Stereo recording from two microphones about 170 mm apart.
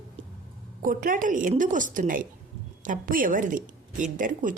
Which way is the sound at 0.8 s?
55° right (ahead or behind).